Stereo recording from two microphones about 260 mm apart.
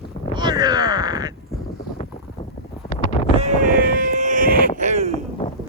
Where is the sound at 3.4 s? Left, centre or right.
Right.